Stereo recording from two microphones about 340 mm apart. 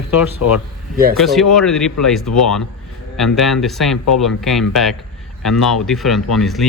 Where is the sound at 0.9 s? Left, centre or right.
Right.